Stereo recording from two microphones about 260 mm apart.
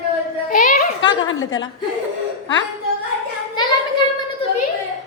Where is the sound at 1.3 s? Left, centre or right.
Left.